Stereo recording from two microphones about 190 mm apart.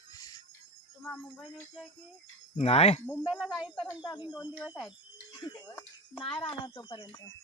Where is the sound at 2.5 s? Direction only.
35° left (ahead or behind).